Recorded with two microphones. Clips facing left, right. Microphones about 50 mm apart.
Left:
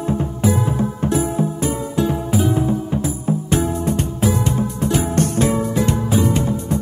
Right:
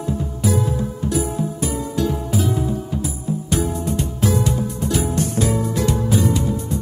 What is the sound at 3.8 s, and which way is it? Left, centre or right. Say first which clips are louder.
Music: left 3 dB; left.